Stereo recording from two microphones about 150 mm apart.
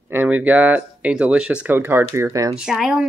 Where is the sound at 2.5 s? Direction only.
5° right (ahead or behind).